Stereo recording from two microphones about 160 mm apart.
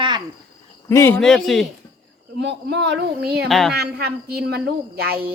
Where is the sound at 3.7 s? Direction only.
85° right.